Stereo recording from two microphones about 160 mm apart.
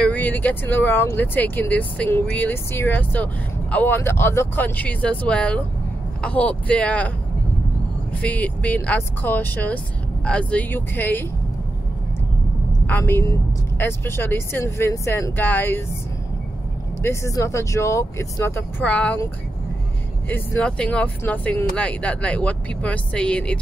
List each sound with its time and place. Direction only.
0.0 s speech: 10° left (ahead or behind)
8.1 s speech: 10° left (ahead or behind)
12.8 s speech: 10° left (ahead or behind)
17.0 s speech: 20° left (ahead or behind)
20.2 s speech: 10° left (ahead or behind)